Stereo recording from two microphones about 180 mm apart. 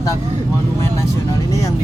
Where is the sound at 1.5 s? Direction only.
20° left (ahead or behind).